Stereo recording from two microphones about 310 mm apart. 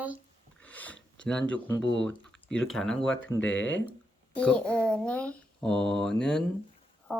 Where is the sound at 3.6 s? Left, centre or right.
Left.